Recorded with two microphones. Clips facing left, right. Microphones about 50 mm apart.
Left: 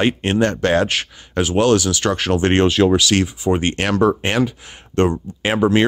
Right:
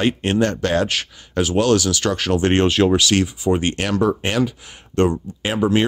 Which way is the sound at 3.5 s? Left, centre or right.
Left.